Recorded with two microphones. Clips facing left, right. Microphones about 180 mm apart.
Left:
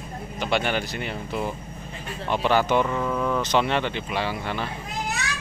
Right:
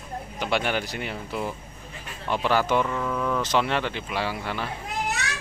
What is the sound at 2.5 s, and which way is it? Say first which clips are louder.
Speech: left 2 dB; 5° right (ahead or behind).